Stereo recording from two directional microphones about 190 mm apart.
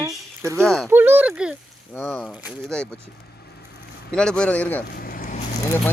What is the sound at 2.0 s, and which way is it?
Speech, 10° left (ahead or behind).